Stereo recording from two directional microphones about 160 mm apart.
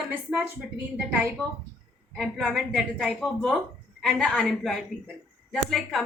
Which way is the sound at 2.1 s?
Centre (ahead or behind).